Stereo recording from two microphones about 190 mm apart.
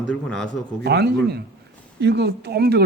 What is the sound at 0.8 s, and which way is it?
A man's voice, 60° right (ahead or behind).